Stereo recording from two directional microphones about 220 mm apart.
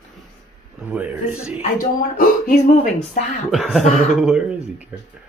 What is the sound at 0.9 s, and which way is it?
Speech, 5° right (ahead or behind).